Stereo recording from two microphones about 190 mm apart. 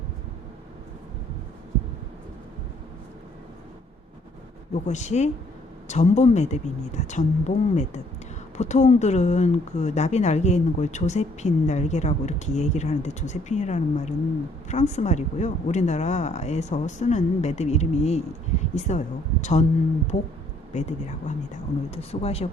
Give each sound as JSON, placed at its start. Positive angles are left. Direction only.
{"t": 4.7, "sound": "speech", "side_deg": 40}